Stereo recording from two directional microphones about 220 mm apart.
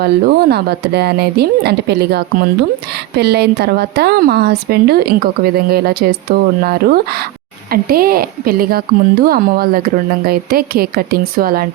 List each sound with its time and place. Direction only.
0.0 s a woman's voice: 45° right (ahead or behind)